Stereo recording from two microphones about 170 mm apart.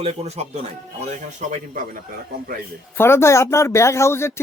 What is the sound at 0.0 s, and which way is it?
Speech, 40° right (ahead or behind).